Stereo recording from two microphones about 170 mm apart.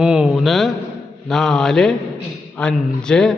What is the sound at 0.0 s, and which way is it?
A man's voice, 5° right (ahead or behind).